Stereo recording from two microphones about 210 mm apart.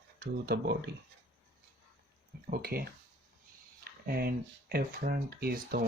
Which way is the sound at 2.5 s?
45° right (ahead or behind).